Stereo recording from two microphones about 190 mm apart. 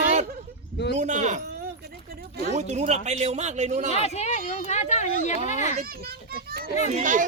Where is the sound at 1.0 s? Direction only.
40° right (ahead or behind).